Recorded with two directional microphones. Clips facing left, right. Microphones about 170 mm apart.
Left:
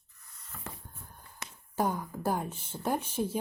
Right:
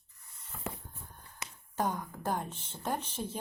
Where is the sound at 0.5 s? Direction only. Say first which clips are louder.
Right 5 dB; 15° right (ahead or behind).